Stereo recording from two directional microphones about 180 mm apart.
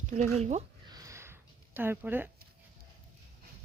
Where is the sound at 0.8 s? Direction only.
20° right (ahead or behind).